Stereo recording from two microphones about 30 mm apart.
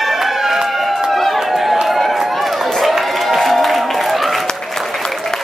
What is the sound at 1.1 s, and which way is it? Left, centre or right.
Chatter, centre.